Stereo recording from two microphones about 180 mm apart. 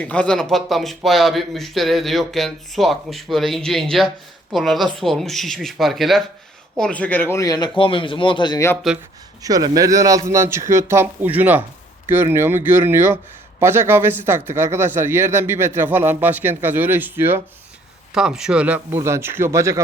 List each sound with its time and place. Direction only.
0.0 s a man's voice: 5° left (ahead or behind)
9.4 s speech: 20° right (ahead or behind)